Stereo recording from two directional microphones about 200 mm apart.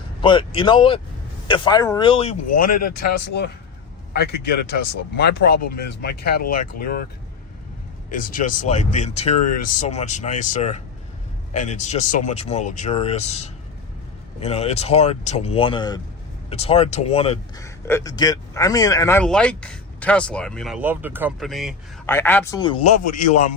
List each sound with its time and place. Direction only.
0.2 s a man's voice: 25° left (ahead or behind)
2.5 s speech: 45° left (ahead or behind)
8.1 s a man's voice: 40° left (ahead or behind)
17.6 s speech: 15° left (ahead or behind)
22.0 s a man's voice: 10° left (ahead or behind); by 23.4 s 35° left (ahead or behind)